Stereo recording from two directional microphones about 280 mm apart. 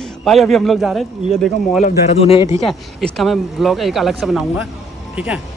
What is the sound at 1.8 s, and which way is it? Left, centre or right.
Speech, left.